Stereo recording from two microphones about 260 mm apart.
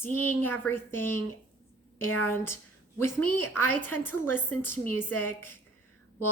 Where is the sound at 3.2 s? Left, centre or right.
Left.